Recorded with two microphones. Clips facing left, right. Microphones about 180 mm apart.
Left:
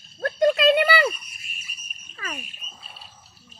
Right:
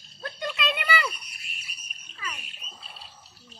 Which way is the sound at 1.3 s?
70° right (ahead or behind).